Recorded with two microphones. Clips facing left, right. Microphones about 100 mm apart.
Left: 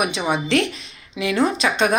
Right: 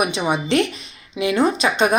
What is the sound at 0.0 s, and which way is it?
A woman's voice, 5° right (ahead or behind).